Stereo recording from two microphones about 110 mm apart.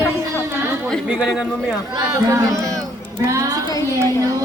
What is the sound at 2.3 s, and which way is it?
Speech, 25° right (ahead or behind).